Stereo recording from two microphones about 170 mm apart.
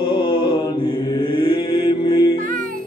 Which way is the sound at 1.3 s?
30° left (ahead or behind).